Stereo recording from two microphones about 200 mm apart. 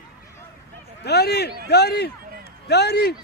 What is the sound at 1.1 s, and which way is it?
A man's voice, 55° left (ahead or behind).